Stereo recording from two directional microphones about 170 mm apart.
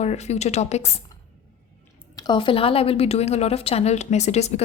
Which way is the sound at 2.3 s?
30° left (ahead or behind).